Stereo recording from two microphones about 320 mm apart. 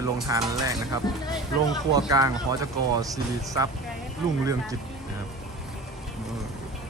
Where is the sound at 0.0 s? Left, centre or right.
Centre.